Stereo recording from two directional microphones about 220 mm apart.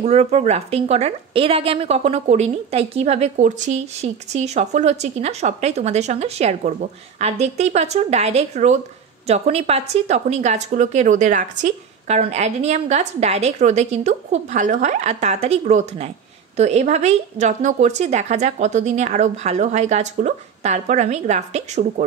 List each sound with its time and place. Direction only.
0.0 s a woman's voice: 30° right (ahead or behind)